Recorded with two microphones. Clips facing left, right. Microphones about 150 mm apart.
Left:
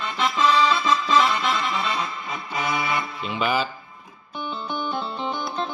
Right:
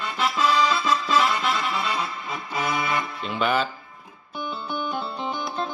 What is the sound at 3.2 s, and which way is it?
Speech, centre (ahead or behind).